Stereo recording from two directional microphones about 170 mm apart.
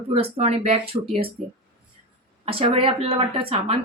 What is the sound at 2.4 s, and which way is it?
Speech, 35° right (ahead or behind).